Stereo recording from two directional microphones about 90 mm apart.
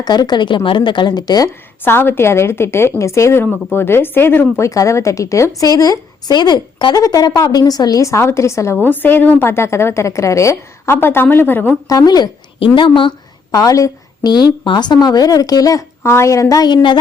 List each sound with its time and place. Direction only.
0.0 s a woman's voice: 50° left (ahead or behind)
1.8 s a woman's voice: 25° left (ahead or behind)
4.6 s a woman's voice: 35° left (ahead or behind)
11.9 s a woman's voice: 45° left (ahead or behind)
12.5 s a woman's voice: 70° left (ahead or behind)
13.5 s a woman's voice: 40° left (ahead or behind)
14.3 s a woman's voice: 55° left (ahead or behind)
16.0 s a woman's voice: 30° left (ahead or behind); by 17.0 s 55° left (ahead or behind)